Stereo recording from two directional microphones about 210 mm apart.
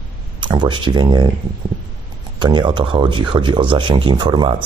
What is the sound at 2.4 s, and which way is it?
Speech, 20° right (ahead or behind).